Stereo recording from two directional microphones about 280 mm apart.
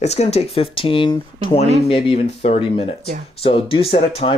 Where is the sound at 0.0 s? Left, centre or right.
Left.